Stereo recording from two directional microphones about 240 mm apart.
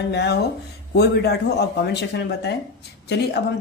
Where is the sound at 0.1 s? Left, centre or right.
Left.